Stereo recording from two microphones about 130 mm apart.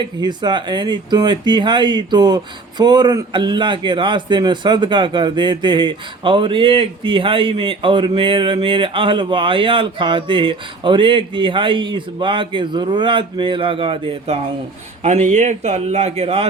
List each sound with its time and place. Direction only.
0.0 s speech: 35° right (ahead or behind)
15.0 s a man's voice: 65° right (ahead or behind)